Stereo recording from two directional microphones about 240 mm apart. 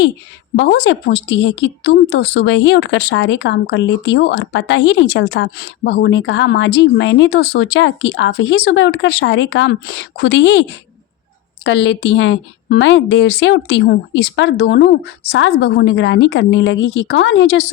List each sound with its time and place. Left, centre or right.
0.5 s a woman's voice: left